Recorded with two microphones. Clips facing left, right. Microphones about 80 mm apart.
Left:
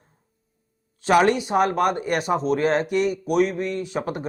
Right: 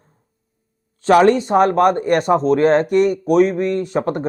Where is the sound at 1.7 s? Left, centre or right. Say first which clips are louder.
Right 7 dB; right.